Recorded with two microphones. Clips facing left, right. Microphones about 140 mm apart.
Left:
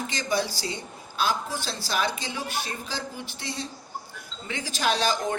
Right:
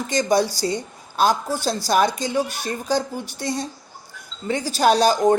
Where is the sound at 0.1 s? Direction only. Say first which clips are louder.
Right 11 dB; 45° right (ahead or behind).